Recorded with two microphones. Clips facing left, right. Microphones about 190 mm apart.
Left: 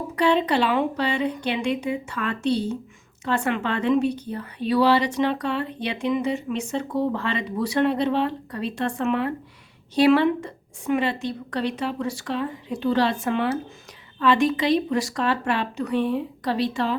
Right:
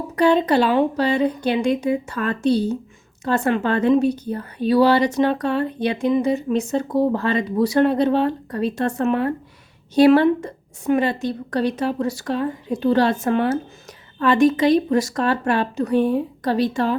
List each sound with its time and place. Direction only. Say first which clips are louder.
0.2 s a woman's voice: right 4 dB; 40° right (ahead or behind)